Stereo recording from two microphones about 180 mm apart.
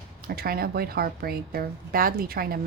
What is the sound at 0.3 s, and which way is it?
A woman's voice, 55° right (ahead or behind).